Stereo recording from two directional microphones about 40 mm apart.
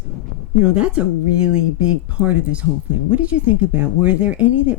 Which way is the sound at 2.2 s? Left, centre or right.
Right.